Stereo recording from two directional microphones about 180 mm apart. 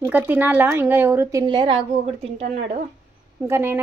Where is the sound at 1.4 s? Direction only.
25° right (ahead or behind).